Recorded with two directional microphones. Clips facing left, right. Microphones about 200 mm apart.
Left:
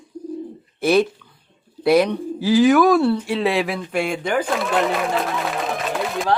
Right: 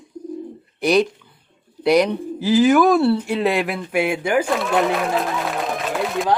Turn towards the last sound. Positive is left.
turn(degrees=0)  # may be behind; listen again after turning